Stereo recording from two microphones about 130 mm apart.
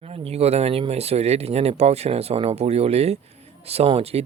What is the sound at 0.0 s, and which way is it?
Speech, 50° right (ahead or behind).